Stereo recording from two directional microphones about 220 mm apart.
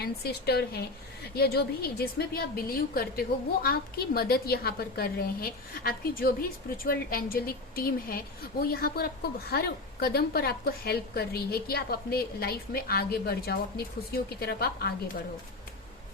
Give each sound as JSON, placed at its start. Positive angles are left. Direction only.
{"t": 0.0, "sound": "a woman's voice", "side_deg": 45}